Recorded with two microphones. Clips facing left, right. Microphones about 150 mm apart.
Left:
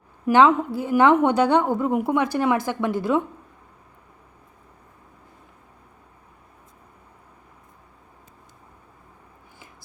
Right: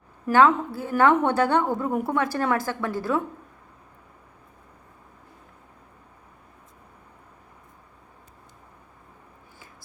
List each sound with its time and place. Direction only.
0.3 s a woman's voice: 15° left (ahead or behind)